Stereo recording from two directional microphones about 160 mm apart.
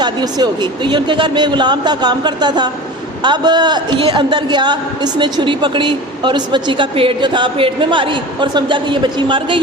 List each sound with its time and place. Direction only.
0.0 s a man's voice: 25° right (ahead or behind)